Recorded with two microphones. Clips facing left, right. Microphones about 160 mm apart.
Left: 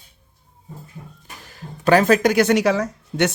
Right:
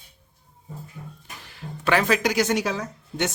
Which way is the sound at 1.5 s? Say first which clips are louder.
Left 7 dB; 40° left (ahead or behind).